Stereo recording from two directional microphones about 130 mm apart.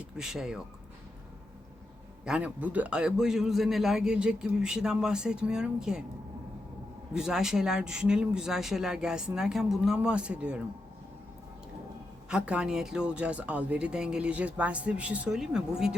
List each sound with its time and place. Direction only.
0.2 s a man's voice: 5° right (ahead or behind)
2.2 s a man's voice: 10° right (ahead or behind)
7.1 s a man's voice: 5° right (ahead or behind)
12.3 s speech: 5° right (ahead or behind)